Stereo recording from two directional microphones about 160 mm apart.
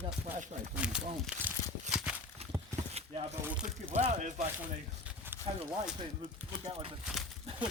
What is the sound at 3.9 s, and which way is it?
Speech, 45° right (ahead or behind).